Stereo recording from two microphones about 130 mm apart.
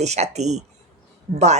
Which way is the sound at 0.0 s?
60° right (ahead or behind).